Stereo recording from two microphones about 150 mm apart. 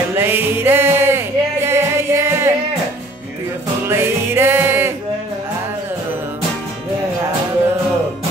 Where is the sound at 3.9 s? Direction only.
15° right (ahead or behind).